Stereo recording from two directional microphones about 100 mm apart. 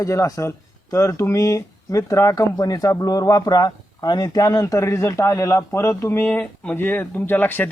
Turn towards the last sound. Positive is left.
turn(degrees=20)  # may be behind; listen again after turning